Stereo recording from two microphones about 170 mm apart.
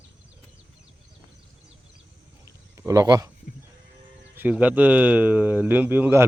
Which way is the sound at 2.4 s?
20° right (ahead or behind).